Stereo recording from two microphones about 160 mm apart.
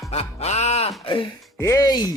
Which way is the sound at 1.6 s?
20° left (ahead or behind).